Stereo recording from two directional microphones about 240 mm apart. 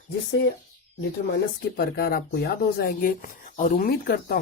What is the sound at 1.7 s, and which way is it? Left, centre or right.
Speech, left.